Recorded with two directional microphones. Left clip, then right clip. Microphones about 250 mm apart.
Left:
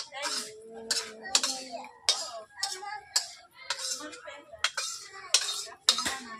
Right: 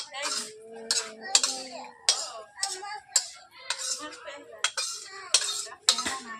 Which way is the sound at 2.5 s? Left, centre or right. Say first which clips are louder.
Right 1 dB; right.